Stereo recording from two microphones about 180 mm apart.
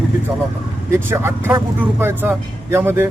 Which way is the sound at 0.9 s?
15° right (ahead or behind).